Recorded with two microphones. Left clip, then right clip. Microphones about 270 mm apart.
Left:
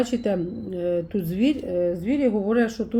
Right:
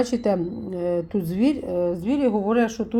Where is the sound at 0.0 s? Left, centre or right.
Centre.